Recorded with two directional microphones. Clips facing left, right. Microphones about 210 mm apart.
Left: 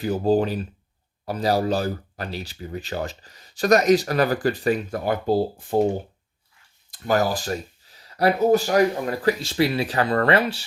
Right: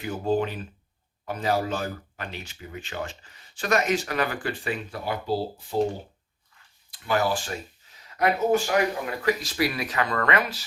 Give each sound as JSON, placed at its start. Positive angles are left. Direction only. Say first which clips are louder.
{"t": 0.0, "sound": "speech", "louder": "left 5 dB", "side_deg": 35}
{"t": 6.9, "sound": "speech", "louder": "left 3 dB", "side_deg": 40}